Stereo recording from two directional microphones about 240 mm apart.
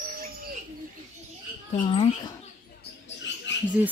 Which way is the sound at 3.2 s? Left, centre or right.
Left.